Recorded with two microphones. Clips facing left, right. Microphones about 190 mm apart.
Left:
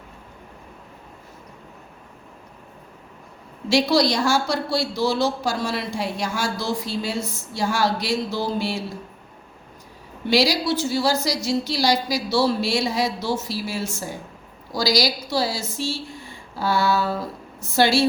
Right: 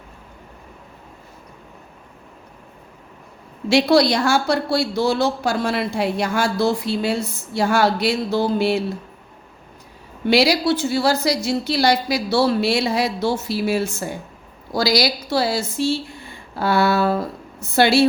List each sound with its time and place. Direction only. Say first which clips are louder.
3.7 s a woman's voice: right 4 dB; 60° right (ahead or behind)
10.2 s a woman's voice: right 4 dB; 60° right (ahead or behind)